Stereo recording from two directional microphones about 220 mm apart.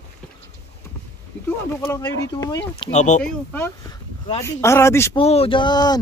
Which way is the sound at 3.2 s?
10° left (ahead or behind).